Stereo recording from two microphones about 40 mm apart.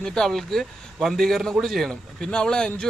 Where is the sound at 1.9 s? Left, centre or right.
Centre.